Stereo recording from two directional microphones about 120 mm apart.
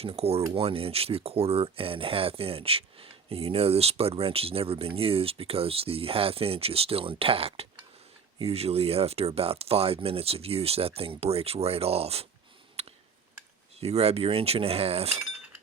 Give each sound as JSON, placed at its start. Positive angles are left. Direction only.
{"t": 0.0, "sound": "speech", "side_deg": -55}
{"t": 12.8, "sound": "a sound", "side_deg": -60}
{"t": 13.7, "sound": "speech", "side_deg": -60}